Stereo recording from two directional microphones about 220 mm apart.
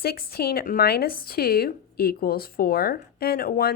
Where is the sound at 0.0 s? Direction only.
45° left (ahead or behind).